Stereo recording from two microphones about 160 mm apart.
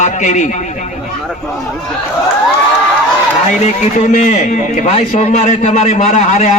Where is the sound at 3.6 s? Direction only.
50° left (ahead or behind).